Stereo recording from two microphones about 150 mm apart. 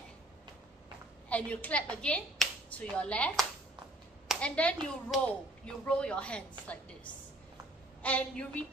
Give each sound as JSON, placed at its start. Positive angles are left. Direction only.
{"t": 1.3, "sound": "speech", "side_deg": 10}
{"t": 8.0, "sound": "speech", "side_deg": 10}